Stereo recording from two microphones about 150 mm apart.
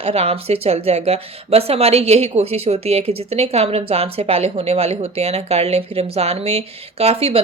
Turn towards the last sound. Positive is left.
turn(degrees=-40)  # may be behind; listen again after turning